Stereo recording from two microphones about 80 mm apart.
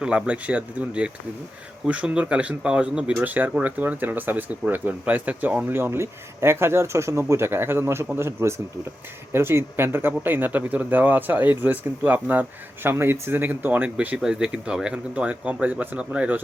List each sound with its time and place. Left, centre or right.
0.0 s speech: centre
5.6 s speech: right